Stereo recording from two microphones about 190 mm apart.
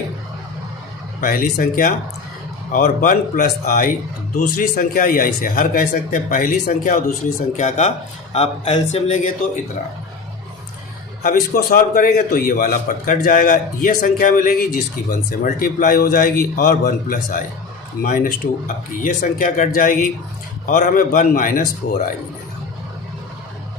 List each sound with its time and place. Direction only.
1.2 s speech: 45° left (ahead or behind)
11.2 s speech: 45° left (ahead or behind)